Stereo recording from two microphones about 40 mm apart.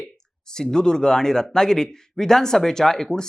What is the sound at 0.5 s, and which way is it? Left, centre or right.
Speech, centre.